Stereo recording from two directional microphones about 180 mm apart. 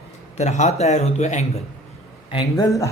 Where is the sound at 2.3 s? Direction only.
25° left (ahead or behind).